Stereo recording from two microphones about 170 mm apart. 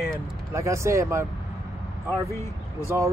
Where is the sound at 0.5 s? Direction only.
15° right (ahead or behind).